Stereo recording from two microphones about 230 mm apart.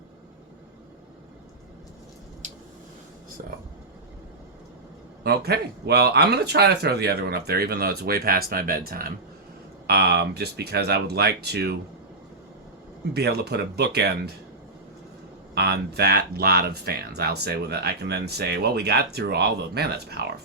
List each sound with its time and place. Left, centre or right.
5.2 s speech: right
13.1 s speech: right
15.5 s speech: right